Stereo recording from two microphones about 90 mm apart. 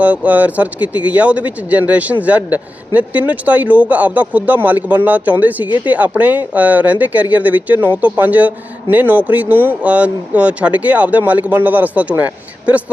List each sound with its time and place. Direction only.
0.0 s speech: 15° right (ahead or behind)
5.6 s speech: 60° left (ahead or behind)
5.9 s speech: 15° right (ahead or behind)